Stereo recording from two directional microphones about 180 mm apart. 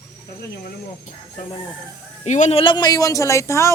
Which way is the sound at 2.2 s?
40° left (ahead or behind).